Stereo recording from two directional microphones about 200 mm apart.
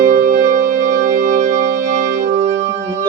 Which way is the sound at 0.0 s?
40° right (ahead or behind).